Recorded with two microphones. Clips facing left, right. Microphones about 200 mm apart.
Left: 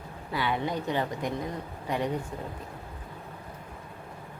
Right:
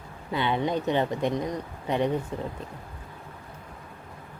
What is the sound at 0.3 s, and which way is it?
Speech, 25° right (ahead or behind).